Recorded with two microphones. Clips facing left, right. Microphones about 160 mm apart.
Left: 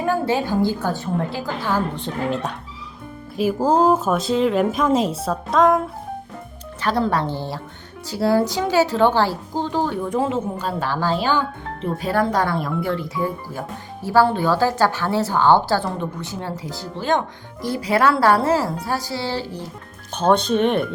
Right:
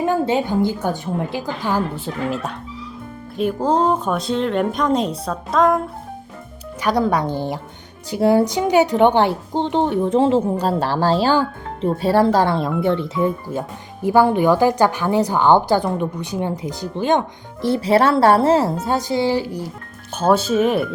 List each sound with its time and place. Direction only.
0.0 s a woman's voice: 20° right (ahead or behind); by 5.8 s centre (ahead or behind)
6.8 s a woman's voice: 15° right (ahead or behind)